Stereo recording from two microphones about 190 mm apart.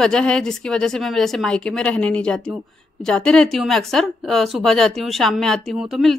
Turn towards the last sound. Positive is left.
turn(degrees=0)  # may be behind; listen again after turning